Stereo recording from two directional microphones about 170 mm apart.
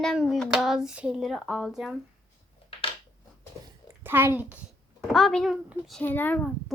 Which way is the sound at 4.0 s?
15° right (ahead or behind).